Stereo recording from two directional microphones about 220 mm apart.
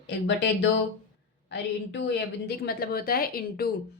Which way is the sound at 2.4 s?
45° left (ahead or behind).